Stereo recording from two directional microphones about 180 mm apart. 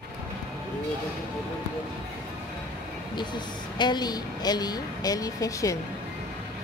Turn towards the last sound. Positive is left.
turn(degrees=20)  # may be behind; listen again after turning